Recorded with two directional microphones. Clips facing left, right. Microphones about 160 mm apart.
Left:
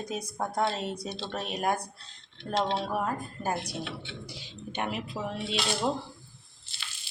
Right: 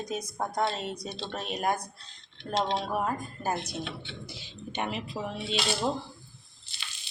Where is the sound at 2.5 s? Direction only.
15° right (ahead or behind).